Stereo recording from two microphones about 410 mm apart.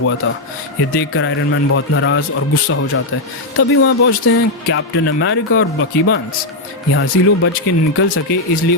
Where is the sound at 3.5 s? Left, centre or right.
Left.